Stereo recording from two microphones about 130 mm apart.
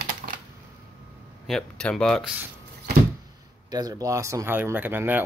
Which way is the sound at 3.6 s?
30° right (ahead or behind).